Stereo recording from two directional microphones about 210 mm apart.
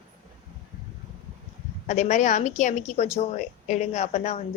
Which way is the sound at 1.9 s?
35° left (ahead or behind).